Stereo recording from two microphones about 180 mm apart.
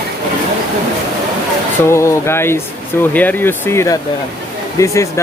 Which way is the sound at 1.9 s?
15° left (ahead or behind).